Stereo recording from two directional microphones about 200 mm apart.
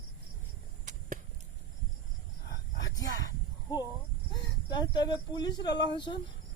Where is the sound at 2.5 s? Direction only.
20° left (ahead or behind).